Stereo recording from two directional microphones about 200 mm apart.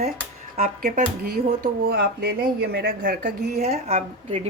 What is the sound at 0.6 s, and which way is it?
A woman's voice, 40° right (ahead or behind).